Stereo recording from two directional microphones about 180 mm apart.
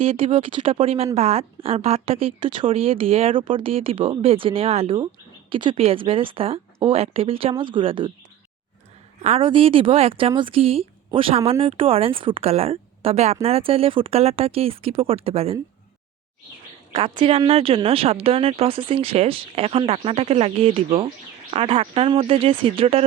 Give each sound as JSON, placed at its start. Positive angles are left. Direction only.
{"t": 0.0, "sound": "speech", "side_deg": -30}
{"t": 9.2, "sound": "speech", "side_deg": -30}
{"t": 16.9, "sound": "speech", "side_deg": -30}